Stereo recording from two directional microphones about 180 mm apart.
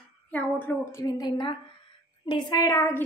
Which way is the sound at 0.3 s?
10° left (ahead or behind).